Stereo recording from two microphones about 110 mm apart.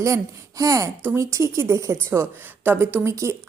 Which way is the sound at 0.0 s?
30° right (ahead or behind).